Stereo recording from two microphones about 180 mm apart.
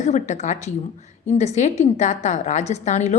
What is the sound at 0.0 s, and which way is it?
A woman's voice, 40° left (ahead or behind).